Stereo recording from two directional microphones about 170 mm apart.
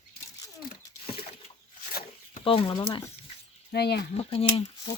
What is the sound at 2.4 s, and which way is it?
Speech, 30° left (ahead or behind).